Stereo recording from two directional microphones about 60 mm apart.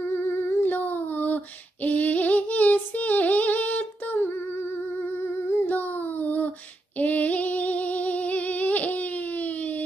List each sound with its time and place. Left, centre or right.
0.1 s child singing: left
5.2 s music: left
7.0 s humming: left
8.9 s a sound: left